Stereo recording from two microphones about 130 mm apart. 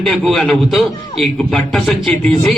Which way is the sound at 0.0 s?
Centre (ahead or behind).